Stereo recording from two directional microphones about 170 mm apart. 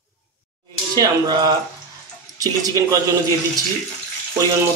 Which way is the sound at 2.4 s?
20° right (ahead or behind).